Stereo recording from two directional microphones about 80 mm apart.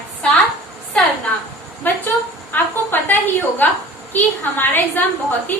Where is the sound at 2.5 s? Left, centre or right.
Left.